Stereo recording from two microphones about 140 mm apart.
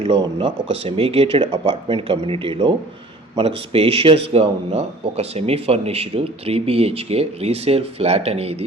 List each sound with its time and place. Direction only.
0.2 s speech: 40° right (ahead or behind)